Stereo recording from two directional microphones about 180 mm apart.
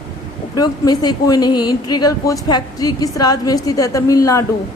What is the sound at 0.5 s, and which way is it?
A woman's voice, 20° left (ahead or behind).